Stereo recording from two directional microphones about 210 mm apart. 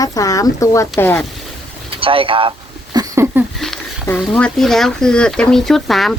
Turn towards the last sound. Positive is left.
turn(degrees=0)  # may be behind; listen again after turning